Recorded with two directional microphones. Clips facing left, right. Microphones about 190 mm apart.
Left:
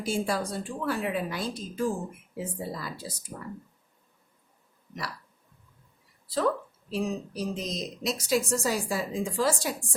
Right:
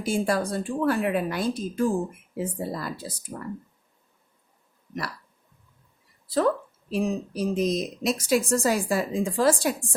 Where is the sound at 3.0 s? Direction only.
55° right (ahead or behind).